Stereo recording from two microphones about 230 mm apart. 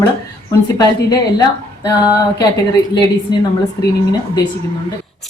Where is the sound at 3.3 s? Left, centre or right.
Centre.